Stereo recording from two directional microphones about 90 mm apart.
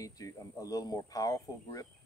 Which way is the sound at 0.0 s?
40° left (ahead or behind).